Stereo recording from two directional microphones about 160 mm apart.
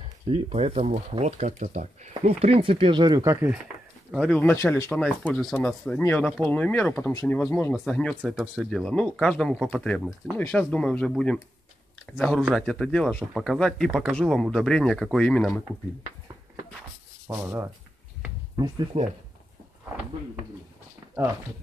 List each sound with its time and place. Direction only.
0.3 s speech: 35° right (ahead or behind); by 3.5 s 15° right (ahead or behind)
4.1 s speech: 5° left (ahead or behind)
5.2 s speech: 5° left (ahead or behind)
7.1 s speech: 20° left (ahead or behind)
17.3 s speech: 10° right (ahead or behind)
18.9 s speech: 35° right (ahead or behind)